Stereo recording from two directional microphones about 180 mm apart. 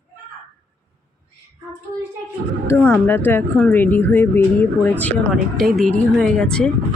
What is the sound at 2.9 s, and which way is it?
A woman's voice, 10° left (ahead or behind).